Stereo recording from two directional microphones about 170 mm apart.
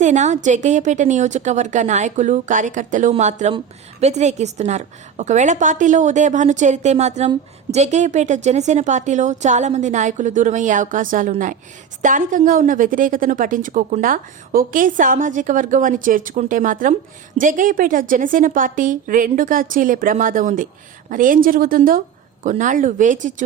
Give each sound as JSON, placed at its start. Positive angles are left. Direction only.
{"t": 0.0, "sound": "a woman's voice", "side_deg": -45}